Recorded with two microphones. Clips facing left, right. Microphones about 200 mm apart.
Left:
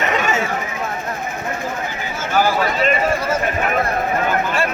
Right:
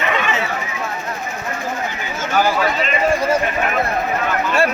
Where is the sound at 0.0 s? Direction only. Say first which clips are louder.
Left 1 dB; 45° left (ahead or behind).